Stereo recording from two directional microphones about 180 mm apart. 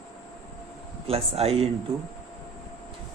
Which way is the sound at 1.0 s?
35° right (ahead or behind).